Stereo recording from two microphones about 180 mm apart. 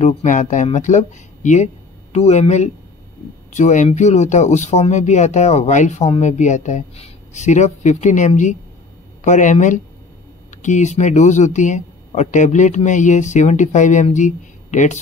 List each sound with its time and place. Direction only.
0.0 s speech: 40° left (ahead or behind)